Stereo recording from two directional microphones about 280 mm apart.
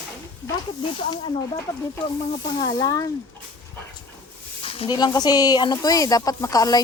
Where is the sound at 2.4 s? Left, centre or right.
Centre.